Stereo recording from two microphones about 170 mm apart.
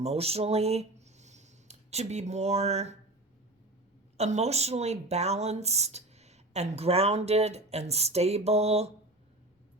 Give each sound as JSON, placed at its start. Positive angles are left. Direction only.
{"t": 0.0, "sound": "speech", "side_deg": -35}
{"t": 4.2, "sound": "speech", "side_deg": -40}